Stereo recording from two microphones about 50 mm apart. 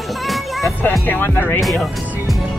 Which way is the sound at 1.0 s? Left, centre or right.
Left.